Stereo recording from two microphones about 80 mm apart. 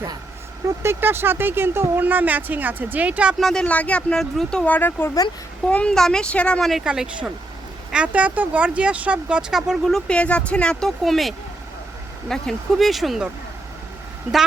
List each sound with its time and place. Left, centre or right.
0.8 s speech: right
3.4 s speech: centre
4.2 s speech: centre
4.6 s speech: left
5.6 s speech: centre
6.8 s speech: centre
9.8 s speech: centre